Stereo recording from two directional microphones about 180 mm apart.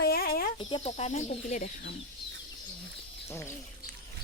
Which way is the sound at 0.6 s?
30° left (ahead or behind).